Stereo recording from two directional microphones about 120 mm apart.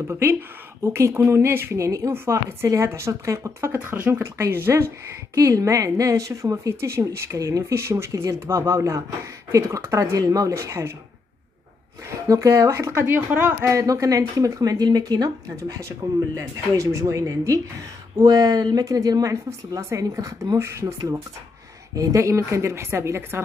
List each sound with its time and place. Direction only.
0.0 s speech: 20° right (ahead or behind)
12.3 s speech: 25° right (ahead or behind)